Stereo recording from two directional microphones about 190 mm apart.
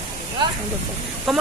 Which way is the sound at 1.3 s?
Centre (ahead or behind).